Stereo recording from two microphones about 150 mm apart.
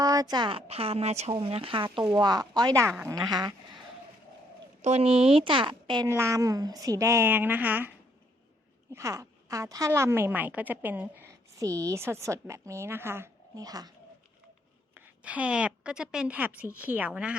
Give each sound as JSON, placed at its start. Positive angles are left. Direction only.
{"t": 0.0, "sound": "speech", "side_deg": -25}
{"t": 4.8, "sound": "speech", "side_deg": -45}
{"t": 6.1, "sound": "a woman's voice", "side_deg": -20}
{"t": 14.9, "sound": "a woman's voice", "side_deg": -10}